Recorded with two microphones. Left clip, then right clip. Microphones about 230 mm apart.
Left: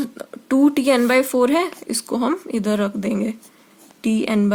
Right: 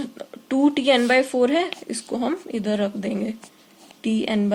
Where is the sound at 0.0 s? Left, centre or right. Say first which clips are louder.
Left 4 dB; left.